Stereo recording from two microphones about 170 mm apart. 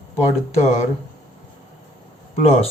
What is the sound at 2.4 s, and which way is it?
Speech, 35° left (ahead or behind).